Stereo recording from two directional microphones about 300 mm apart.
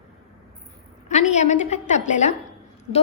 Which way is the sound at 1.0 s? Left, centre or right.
Left.